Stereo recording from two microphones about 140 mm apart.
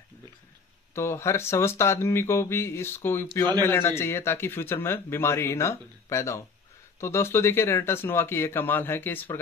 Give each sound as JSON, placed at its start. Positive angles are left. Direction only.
{"t": 0.9, "sound": "speech", "side_deg": 20}